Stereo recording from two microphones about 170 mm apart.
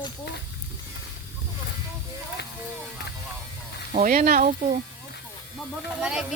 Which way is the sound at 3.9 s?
50° right (ahead or behind).